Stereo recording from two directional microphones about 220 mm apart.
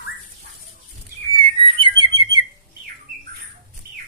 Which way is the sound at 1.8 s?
20° right (ahead or behind).